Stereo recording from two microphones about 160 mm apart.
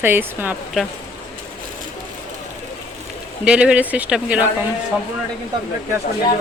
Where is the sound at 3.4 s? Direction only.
5° right (ahead or behind).